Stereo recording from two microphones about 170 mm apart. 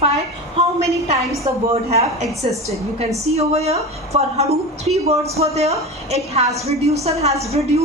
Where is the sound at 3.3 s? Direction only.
35° right (ahead or behind).